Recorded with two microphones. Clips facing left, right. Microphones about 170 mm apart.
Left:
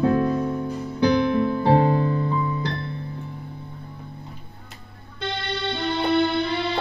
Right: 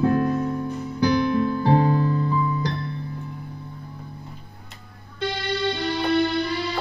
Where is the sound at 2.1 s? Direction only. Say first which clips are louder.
Right 1 dB; 20° left (ahead or behind).